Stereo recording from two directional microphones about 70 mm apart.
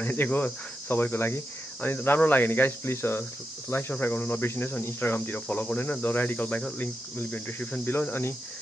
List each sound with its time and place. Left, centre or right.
0.0 s cricket: left
4.0 s speech: left
4.8 s cricket: left
8.1 s speech: left